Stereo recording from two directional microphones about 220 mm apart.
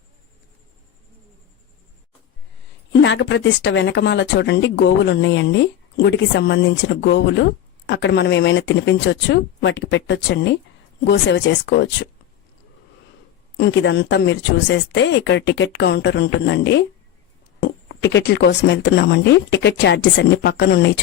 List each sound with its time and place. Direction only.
3.0 s speech: 55° left (ahead or behind)
13.6 s speech: 50° left (ahead or behind)
17.8 s speech: 50° left (ahead or behind)